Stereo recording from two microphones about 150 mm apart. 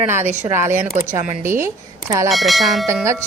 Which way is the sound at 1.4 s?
15° right (ahead or behind).